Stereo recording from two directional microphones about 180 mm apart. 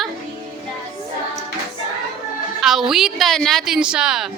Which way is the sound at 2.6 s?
Centre (ahead or behind).